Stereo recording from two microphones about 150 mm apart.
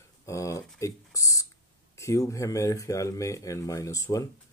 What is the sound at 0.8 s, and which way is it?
Speech, 20° left (ahead or behind).